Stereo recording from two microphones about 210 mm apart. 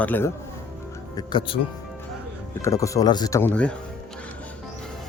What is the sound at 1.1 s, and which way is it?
Speech, 20° left (ahead or behind).